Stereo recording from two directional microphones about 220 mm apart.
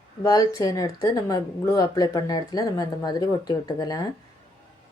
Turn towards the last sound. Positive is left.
turn(degrees=15)  # may be behind; listen again after turning